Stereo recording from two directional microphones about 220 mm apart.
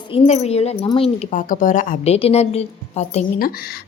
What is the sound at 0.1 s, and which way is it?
Speech, 25° left (ahead or behind).